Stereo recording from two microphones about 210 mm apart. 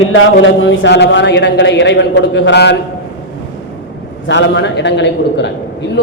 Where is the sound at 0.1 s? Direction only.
65° left (ahead or behind).